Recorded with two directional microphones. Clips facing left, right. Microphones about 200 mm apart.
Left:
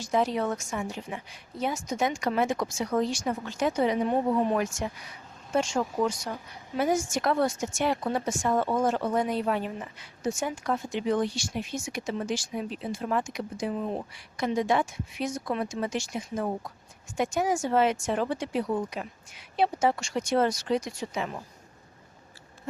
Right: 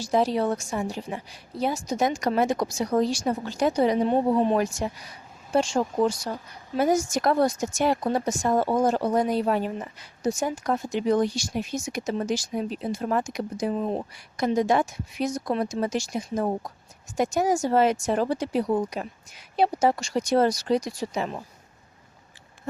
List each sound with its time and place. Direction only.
0.0 s a woman's voice: 35° right (ahead or behind)